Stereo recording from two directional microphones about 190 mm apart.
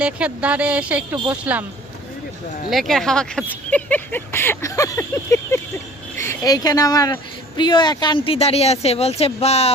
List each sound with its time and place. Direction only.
0.0 s speech: 5° right (ahead or behind)
2.6 s speech: centre (ahead or behind); by 9.7 s 35° left (ahead or behind)